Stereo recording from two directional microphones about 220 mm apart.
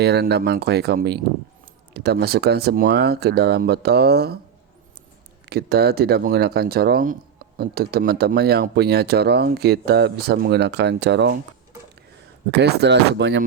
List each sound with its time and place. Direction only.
0.0 s speech: 50° right (ahead or behind)
5.5 s speech: 45° right (ahead or behind)
12.5 s speech: 50° right (ahead or behind)